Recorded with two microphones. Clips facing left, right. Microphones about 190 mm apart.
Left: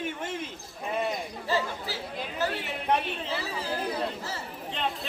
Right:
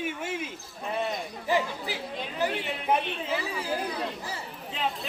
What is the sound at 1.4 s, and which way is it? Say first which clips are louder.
Speech: right 2 dB; 15° right (ahead or behind).